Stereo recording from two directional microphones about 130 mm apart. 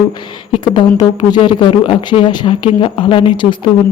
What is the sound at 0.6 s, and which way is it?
Speech, 35° left (ahead or behind).